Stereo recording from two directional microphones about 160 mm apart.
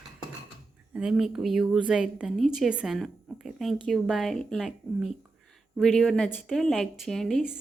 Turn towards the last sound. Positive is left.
turn(degrees=0)  # may be behind; listen again after turning